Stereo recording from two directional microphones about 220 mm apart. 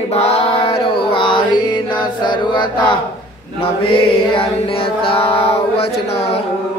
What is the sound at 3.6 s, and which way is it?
Mantra, 25° left (ahead or behind).